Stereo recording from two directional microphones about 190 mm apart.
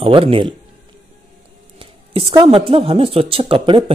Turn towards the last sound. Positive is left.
turn(degrees=-30)  # may be behind; listen again after turning